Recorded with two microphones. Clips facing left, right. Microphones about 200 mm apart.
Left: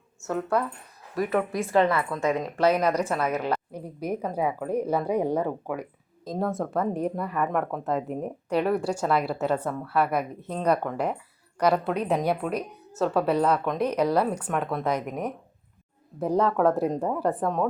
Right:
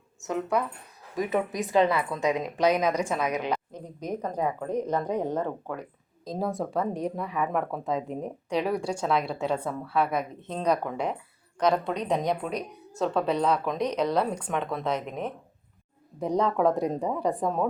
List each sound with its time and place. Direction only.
0.2 s a woman's voice: 15° right (ahead or behind)
3.7 s speech: 10° left (ahead or behind)
6.3 s speech: centre (ahead or behind)